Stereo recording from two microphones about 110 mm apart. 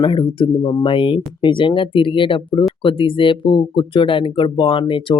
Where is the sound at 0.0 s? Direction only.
45° left (ahead or behind).